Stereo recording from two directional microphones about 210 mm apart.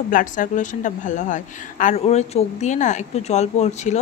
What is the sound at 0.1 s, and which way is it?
A woman's voice, 40° left (ahead or behind).